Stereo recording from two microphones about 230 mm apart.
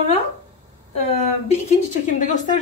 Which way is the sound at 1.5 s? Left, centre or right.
Left.